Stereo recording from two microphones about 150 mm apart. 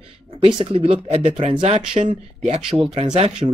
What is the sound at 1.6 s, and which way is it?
Speech, 50° right (ahead or behind).